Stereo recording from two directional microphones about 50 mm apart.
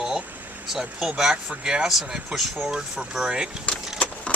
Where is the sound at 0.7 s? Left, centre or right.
Centre.